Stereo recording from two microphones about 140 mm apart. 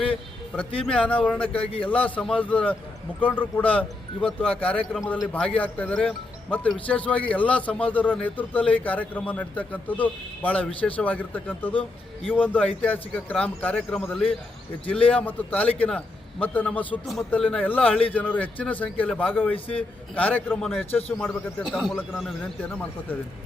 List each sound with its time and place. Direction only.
0.8 s a man's voice: 5° left (ahead or behind)
19.5 s a man's voice: 40° left (ahead or behind)
20.1 s a man's voice: 10° left (ahead or behind)